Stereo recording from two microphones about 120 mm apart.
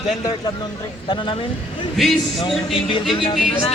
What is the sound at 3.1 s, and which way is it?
Speech, 45° left (ahead or behind).